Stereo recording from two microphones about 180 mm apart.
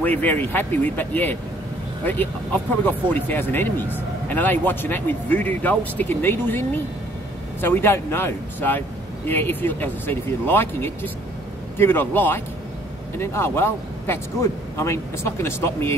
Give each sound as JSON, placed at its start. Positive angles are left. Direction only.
{"t": 0.0, "sound": "speech", "side_deg": 10}
{"t": 7.6, "sound": "speech", "side_deg": 10}